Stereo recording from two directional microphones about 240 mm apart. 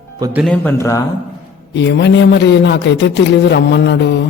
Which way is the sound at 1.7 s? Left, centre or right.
Left.